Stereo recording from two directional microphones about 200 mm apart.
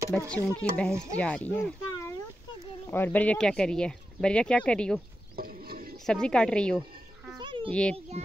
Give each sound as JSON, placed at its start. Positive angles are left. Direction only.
{"t": 0.3, "sound": "speech", "side_deg": 5}
{"t": 5.3, "sound": "a sound", "side_deg": -45}
{"t": 6.0, "sound": "speech", "side_deg": 5}
{"t": 7.3, "sound": "dog", "side_deg": -25}
{"t": 7.7, "sound": "speech", "side_deg": 5}